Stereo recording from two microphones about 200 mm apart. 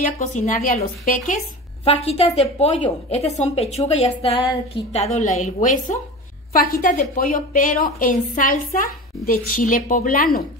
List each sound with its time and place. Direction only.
0.0 s a woman's voice: 40° left (ahead or behind)